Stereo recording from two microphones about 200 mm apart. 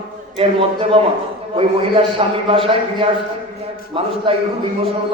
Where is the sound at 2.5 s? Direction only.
25° right (ahead or behind).